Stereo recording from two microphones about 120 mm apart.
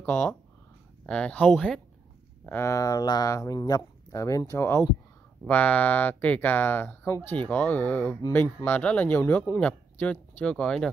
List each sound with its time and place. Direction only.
0.0 s speech: 15° left (ahead or behind)
2.4 s speech: 20° left (ahead or behind)